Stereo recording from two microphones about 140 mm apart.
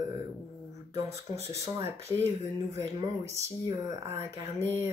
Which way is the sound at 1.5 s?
20° right (ahead or behind).